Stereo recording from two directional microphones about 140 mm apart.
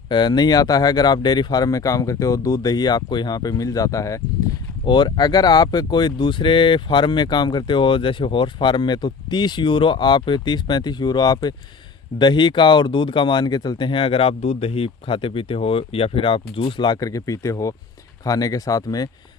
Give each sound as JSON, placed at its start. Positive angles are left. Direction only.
{"t": 0.1, "sound": "speech", "side_deg": 30}